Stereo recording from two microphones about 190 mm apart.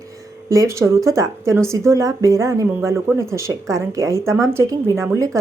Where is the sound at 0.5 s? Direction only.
15° right (ahead or behind).